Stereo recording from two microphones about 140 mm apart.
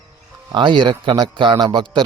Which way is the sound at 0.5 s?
35° right (ahead or behind).